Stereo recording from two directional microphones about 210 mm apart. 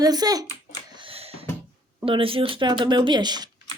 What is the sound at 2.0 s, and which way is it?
Speech, 25° right (ahead or behind).